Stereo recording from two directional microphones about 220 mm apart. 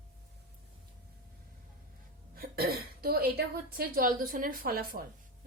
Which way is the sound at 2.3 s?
45° right (ahead or behind).